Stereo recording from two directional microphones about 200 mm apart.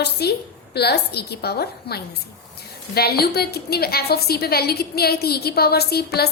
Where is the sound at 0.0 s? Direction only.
55° left (ahead or behind).